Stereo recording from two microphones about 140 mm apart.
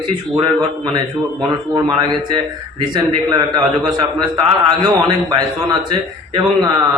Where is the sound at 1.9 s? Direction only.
35° right (ahead or behind).